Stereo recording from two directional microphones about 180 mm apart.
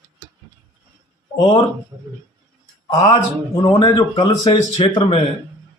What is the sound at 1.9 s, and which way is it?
Speech, 25° right (ahead or behind).